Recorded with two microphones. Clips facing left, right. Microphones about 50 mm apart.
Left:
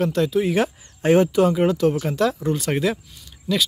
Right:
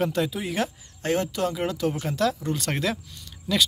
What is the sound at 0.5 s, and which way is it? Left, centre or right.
Speech, centre.